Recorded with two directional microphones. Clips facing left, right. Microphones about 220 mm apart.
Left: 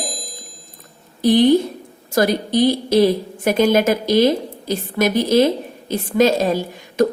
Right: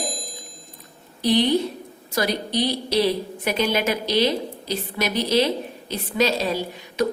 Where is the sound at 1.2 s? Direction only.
50° left (ahead or behind).